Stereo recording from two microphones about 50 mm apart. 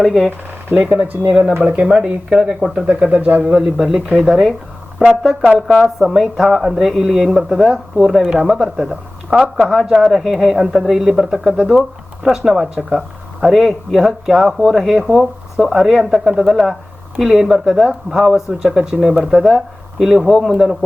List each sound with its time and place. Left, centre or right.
0.0 s speech: centre
0.3 s a sound: right
1.0 s speech: right
1.6 s speech: centre
2.8 s speech: right
3.5 s speech: centre
5.5 s speech: centre
9.9 s speech: centre